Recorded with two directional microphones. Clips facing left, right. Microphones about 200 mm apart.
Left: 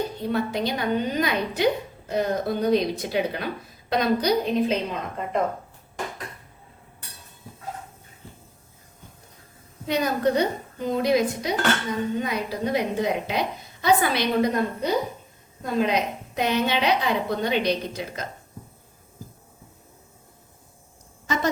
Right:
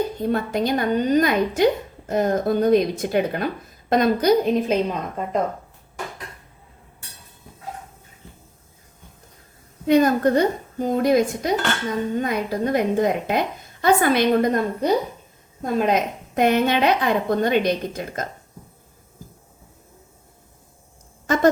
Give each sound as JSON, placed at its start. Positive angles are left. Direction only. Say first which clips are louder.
{"t": 0.2, "sound": "a woman's voice", "louder": "right 3 dB", "side_deg": -50}
{"t": 9.8, "sound": "a woman's voice", "louder": "right 7 dB", "side_deg": -50}
{"t": 21.3, "sound": "a woman's voice", "louder": "right 5 dB", "side_deg": -50}